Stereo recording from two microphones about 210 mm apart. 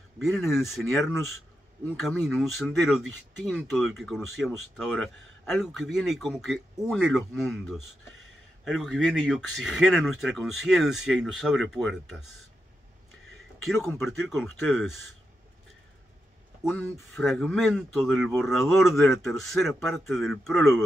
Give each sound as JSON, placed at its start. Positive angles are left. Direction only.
{"t": 0.2, "sound": "speech", "side_deg": 0}
{"t": 13.8, "sound": "speech", "side_deg": 0}
{"t": 16.6, "sound": "speech", "side_deg": 5}